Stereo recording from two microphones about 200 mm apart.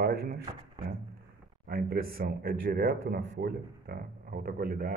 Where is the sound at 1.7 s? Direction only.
50° right (ahead or behind).